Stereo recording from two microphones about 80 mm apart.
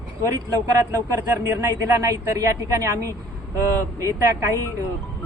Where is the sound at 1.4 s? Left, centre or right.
Right.